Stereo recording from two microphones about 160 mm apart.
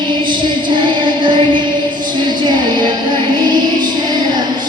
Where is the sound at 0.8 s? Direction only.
30° right (ahead or behind).